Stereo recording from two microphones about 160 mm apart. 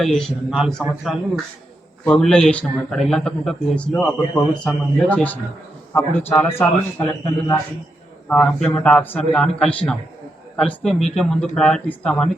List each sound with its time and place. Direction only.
0.0 s a man's voice: centre (ahead or behind)